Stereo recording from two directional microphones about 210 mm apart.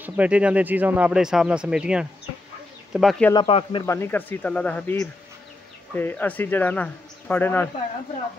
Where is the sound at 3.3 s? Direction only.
25° left (ahead or behind).